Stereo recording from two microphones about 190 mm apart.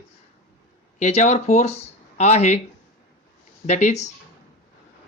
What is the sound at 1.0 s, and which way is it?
Speech, 35° left (ahead or behind).